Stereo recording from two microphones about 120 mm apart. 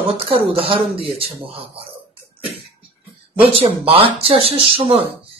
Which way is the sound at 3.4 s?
50° right (ahead or behind).